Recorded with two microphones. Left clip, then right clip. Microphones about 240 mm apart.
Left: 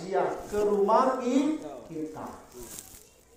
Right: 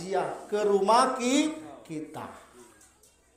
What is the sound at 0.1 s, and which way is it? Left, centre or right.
A man's voice, right.